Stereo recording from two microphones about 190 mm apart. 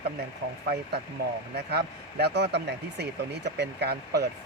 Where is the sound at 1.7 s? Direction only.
60° right (ahead or behind).